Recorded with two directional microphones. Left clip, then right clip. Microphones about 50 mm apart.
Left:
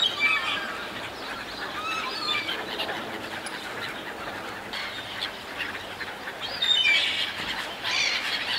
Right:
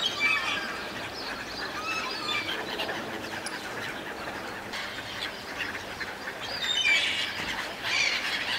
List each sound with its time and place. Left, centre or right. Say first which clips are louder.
0.0 s squawk: left 3 dB; centre
0.4 s a sound: left 2 dB; centre
2.2 s bird: left 2 dB; centre
6.6 s squawk: left 3 dB; centre
7.9 s squawk: left 1 dB; centre
8.2 s squawk: left 2 dB; centre